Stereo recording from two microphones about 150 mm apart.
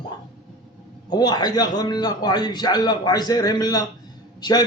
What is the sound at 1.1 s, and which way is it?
A man's voice, 25° left (ahead or behind).